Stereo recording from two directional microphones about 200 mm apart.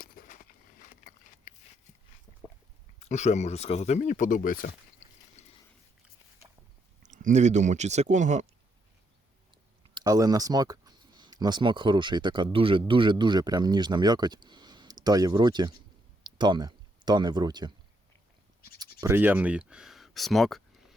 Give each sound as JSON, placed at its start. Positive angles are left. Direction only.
{"t": 0.0, "sound": "a sound", "side_deg": 45}
{"t": 3.0, "sound": "speech", "side_deg": 35}
{"t": 5.4, "sound": "boat", "side_deg": 35}
{"t": 7.0, "sound": "speech", "side_deg": -40}
{"t": 9.9, "sound": "speech", "side_deg": -20}
{"t": 18.9, "sound": "speech", "side_deg": -10}